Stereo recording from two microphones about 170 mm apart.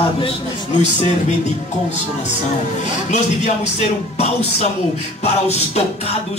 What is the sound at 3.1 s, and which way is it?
Speech, 40° left (ahead or behind).